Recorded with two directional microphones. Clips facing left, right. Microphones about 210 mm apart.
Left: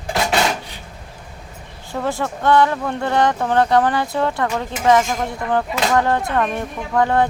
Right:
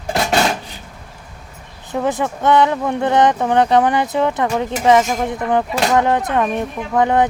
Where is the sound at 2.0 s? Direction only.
20° right (ahead or behind).